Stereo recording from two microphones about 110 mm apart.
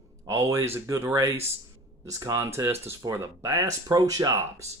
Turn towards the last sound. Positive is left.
turn(degrees=-30)  # may be behind; listen again after turning